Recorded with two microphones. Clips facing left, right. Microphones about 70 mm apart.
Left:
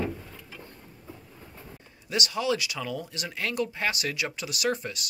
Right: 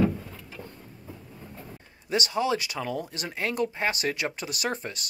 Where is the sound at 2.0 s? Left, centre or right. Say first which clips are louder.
Right 2 dB; right.